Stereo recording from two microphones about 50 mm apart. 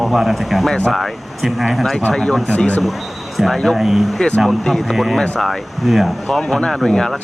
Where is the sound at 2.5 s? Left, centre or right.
Left.